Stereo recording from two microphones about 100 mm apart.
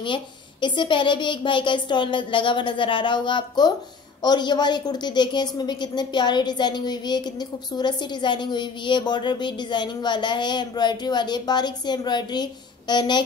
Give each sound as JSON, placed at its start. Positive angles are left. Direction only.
{"t": 0.0, "sound": "a woman's voice", "side_deg": 50}